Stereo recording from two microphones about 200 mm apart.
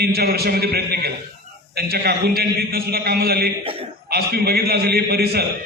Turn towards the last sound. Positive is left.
turn(degrees=-50)  # may be behind; listen again after turning